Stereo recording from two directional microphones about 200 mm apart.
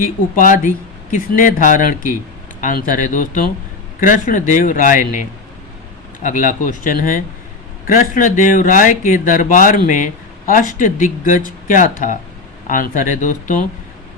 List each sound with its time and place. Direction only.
0.0 s speech: 40° left (ahead or behind)
6.2 s speech: 40° left (ahead or behind)